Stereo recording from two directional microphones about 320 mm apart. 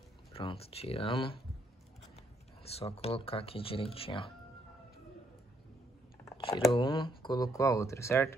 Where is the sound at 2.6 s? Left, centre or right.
Centre.